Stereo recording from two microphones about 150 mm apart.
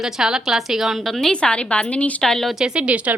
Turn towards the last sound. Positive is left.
turn(degrees=-10)  # may be behind; listen again after turning